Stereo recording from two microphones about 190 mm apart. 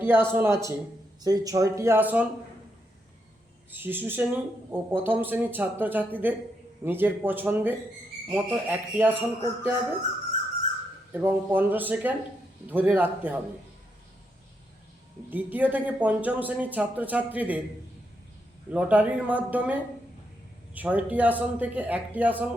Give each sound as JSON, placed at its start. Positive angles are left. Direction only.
{"t": 0.0, "sound": "speech", "side_deg": -10}
{"t": 3.7, "sound": "speech", "side_deg": -10}
{"t": 11.1, "sound": "speech", "side_deg": -10}
{"t": 15.3, "sound": "speech", "side_deg": -10}
{"t": 18.7, "sound": "speech", "side_deg": -5}